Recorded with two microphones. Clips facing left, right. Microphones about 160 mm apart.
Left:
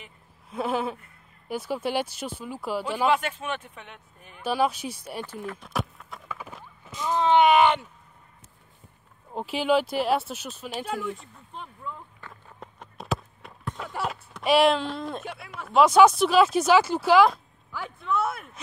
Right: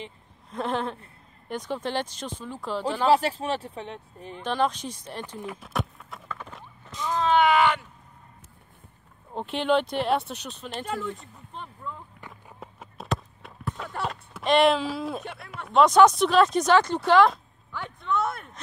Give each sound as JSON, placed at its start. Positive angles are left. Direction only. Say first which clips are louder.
{"t": 0.5, "sound": "speech", "louder": "left 1 dB", "side_deg": 5}
{"t": 3.1, "sound": "speech", "louder": "right 6 dB", "side_deg": -35}
{"t": 4.4, "sound": "speech", "louder": "left 1 dB", "side_deg": 10}
{"t": 5.6, "sound": "clip-clop", "louder": "even", "side_deg": 0}
{"t": 9.3, "sound": "speech", "louder": "even", "side_deg": 5}